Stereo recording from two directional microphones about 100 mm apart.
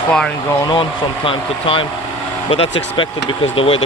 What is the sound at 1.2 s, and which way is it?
Speech, 65° left (ahead or behind).